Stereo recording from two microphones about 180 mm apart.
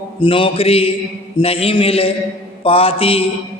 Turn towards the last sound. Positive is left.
turn(degrees=30)  # may be behind; listen again after turning